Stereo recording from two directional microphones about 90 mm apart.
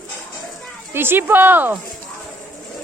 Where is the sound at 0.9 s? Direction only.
25° right (ahead or behind).